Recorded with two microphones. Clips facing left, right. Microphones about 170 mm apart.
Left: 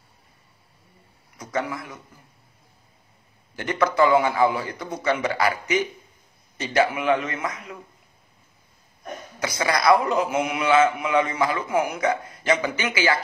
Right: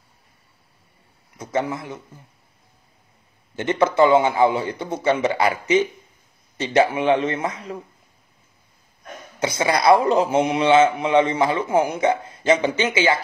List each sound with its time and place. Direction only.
1.4 s a man's voice: 25° right (ahead or behind)
3.5 s a man's voice: 25° right (ahead or behind)
9.4 s a man's voice: 25° right (ahead or behind)